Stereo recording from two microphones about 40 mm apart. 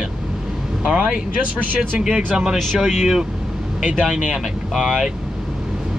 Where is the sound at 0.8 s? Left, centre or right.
Right.